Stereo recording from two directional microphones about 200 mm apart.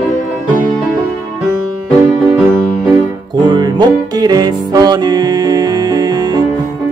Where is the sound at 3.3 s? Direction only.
20° right (ahead or behind).